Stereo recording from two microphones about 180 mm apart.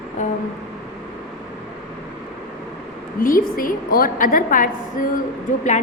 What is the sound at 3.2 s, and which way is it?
A woman's voice, 50° left (ahead or behind).